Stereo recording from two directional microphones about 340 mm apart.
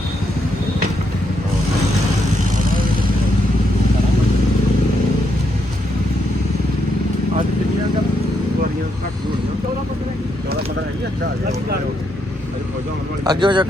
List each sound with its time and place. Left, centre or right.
2.4 s vehicle: right
13.2 s a man's voice: centre